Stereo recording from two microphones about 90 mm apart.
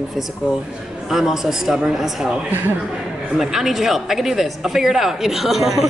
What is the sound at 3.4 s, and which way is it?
Speech, 5° right (ahead or behind).